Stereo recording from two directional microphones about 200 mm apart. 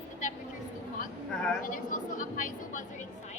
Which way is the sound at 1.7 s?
40° left (ahead or behind).